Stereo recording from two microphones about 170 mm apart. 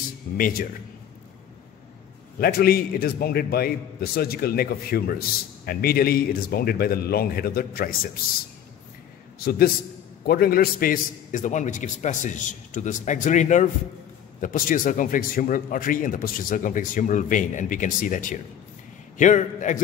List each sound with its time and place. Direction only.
0.4 s a man's voice: 60° left (ahead or behind)
2.4 s a man's voice: 60° left (ahead or behind)
9.4 s a man's voice: 65° left (ahead or behind); by 19.8 s 45° left (ahead or behind)